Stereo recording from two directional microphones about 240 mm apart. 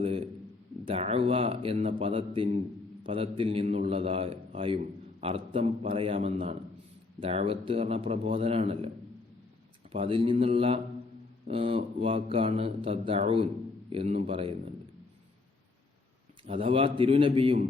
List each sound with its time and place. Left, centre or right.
0.0 s a sound: right
0.9 s speech: right
9.9 s speech: right
16.4 s speech: right